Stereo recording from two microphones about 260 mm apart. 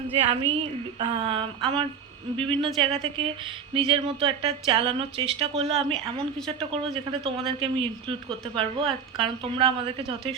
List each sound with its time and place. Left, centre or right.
0.5 s speech: centre
5.6 s speech: centre
7.3 s speech: centre
8.5 s speech: centre
9.2 s speech: centre